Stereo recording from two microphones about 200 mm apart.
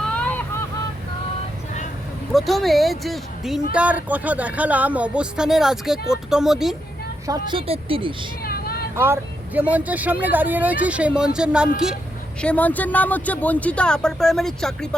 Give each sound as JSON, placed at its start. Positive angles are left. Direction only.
{"t": 0.1, "sound": "vehicle", "side_deg": 5}
{"t": 2.3, "sound": "speech", "side_deg": 0}
{"t": 7.3, "sound": "a woman's voice", "side_deg": -25}
{"t": 8.4, "sound": "vehicle", "side_deg": 50}
{"t": 9.0, "sound": "speech", "side_deg": -10}
{"t": 12.4, "sound": "speech", "side_deg": 5}